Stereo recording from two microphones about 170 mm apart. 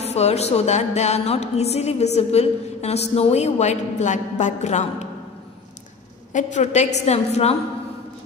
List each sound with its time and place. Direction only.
0.0 s music: 40° left (ahead or behind)
6.3 s music: 45° left (ahead or behind)